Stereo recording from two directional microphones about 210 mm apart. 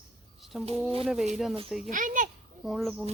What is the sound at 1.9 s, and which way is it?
Speech, 40° right (ahead or behind).